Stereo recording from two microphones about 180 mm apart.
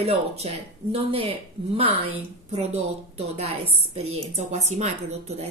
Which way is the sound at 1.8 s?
35° right (ahead or behind).